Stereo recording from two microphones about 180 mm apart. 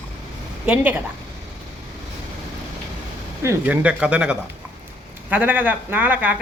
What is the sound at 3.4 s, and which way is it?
Speech, 10° right (ahead or behind).